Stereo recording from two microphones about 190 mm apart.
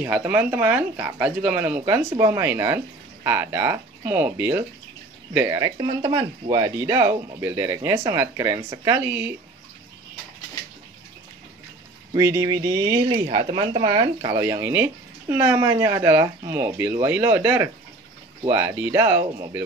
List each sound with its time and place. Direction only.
0.0 s speech: 10° right (ahead or behind); by 6.7 s 25° right (ahead or behind)
6.8 s speech: 15° right (ahead or behind)
12.2 s speech: 15° right (ahead or behind)
13.3 s speech: 40° right (ahead or behind)
13.6 s speech: 25° right (ahead or behind)
14.4 s speech: 15° right (ahead or behind)